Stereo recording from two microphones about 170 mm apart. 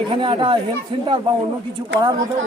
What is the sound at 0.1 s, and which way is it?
Speech, 30° right (ahead or behind).